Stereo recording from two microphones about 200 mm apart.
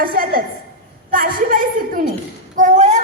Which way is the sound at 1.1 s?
45° right (ahead or behind).